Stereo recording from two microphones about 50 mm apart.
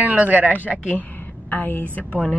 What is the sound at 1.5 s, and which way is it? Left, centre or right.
Speech, left.